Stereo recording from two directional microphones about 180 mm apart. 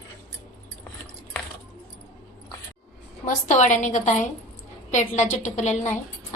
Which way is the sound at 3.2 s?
40° left (ahead or behind).